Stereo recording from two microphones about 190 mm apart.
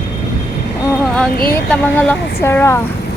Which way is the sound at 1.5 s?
5° left (ahead or behind).